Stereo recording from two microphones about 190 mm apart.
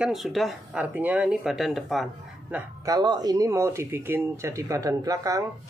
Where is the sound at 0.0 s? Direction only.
Centre (ahead or behind).